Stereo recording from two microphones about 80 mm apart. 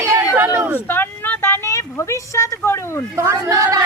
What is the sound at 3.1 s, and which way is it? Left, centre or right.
Speech, right.